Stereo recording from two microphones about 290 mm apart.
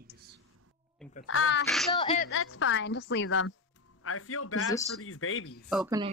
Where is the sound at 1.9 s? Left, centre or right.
Centre.